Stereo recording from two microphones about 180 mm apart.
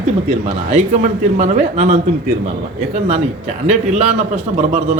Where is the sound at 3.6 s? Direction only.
35° right (ahead or behind).